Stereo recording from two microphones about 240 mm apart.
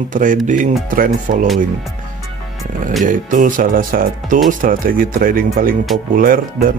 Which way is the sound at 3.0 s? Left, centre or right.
Right.